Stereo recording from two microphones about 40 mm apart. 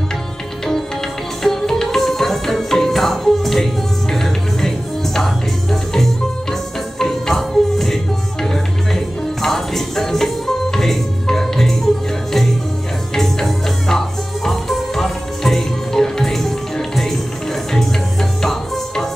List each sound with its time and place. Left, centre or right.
1.4 s music: centre
9.4 s music: centre
18.4 s tabla: centre